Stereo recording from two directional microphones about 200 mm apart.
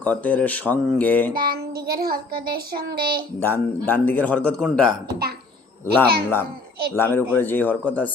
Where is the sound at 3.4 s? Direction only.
10° left (ahead or behind).